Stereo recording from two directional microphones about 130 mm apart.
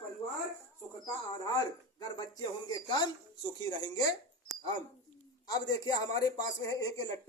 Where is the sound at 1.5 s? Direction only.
30° left (ahead or behind).